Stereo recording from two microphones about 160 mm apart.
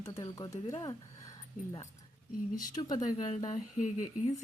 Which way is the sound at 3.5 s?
50° left (ahead or behind).